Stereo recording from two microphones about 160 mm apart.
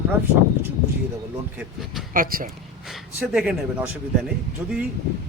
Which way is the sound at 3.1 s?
5° right (ahead or behind).